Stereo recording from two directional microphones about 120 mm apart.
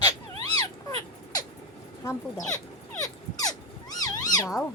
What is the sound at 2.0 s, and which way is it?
Speech, 25° left (ahead or behind).